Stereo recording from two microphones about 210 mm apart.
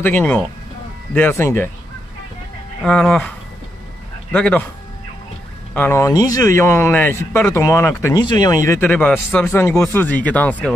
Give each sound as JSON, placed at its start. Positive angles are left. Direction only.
{"t": 0.0, "sound": "speech", "side_deg": 10}
{"t": 2.8, "sound": "speech", "side_deg": 5}
{"t": 5.8, "sound": "speech", "side_deg": 10}
{"t": 9.5, "sound": "speech", "side_deg": 15}